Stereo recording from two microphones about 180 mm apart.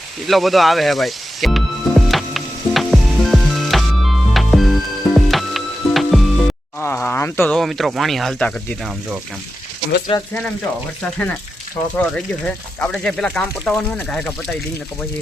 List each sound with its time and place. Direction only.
0.3 s music: centre (ahead or behind)
6.7 s a sound: 10° left (ahead or behind)
7.5 s speech: centre (ahead or behind)
10.1 s speech: 30° left (ahead or behind)
11.0 s speech: 10° left (ahead or behind)